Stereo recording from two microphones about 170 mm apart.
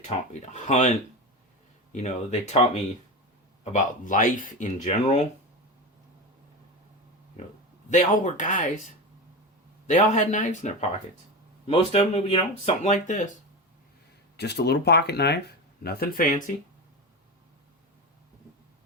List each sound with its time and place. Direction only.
0.0 s speech: 40° left (ahead or behind)
7.9 s speech: 45° left (ahead or behind)
9.8 s speech: 45° left (ahead or behind)
11.6 s speech: 35° left (ahead or behind)
14.3 s speech: 75° left (ahead or behind); by 16.3 s 55° left (ahead or behind)